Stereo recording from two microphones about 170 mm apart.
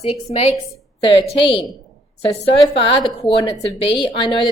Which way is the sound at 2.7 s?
30° left (ahead or behind).